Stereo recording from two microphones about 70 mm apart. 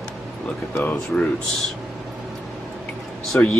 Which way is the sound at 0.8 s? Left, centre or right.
Left.